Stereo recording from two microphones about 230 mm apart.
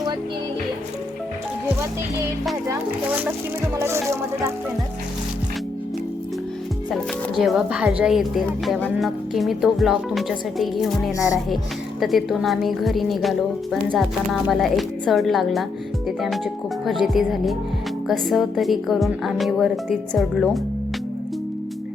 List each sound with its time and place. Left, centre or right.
3.8 s speech: centre
6.9 s speech: centre